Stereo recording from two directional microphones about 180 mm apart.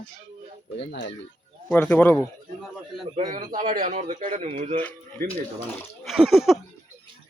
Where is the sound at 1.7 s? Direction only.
10° left (ahead or behind).